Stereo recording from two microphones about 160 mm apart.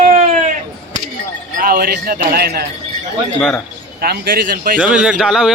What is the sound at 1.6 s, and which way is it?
Speech, 65° right (ahead or behind).